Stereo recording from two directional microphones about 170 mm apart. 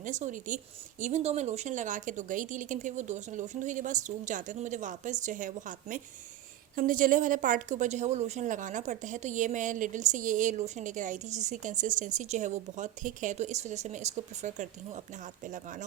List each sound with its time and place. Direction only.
0.0 s a woman's voice: 45° right (ahead or behind)